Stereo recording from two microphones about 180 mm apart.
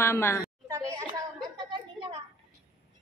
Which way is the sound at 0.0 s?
15° left (ahead or behind).